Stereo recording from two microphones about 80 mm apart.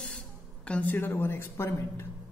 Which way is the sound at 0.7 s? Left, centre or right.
Left.